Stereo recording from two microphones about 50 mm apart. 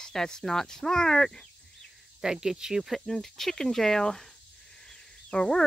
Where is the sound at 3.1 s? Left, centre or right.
Centre.